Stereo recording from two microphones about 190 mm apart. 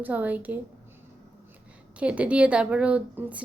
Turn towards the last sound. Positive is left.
turn(degrees=-5)  # may be behind; listen again after turning